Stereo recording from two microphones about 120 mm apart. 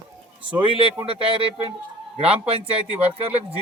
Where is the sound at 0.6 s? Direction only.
50° right (ahead or behind).